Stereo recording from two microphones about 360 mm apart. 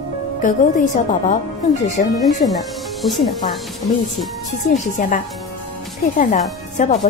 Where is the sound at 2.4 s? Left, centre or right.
Centre.